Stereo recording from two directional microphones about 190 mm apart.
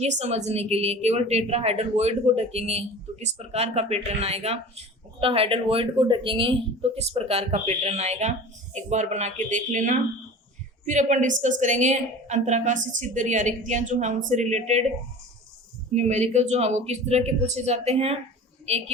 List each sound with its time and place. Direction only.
0.0 s a woman's voice: 35° right (ahead or behind)
16.0 s a woman's voice: 40° right (ahead or behind)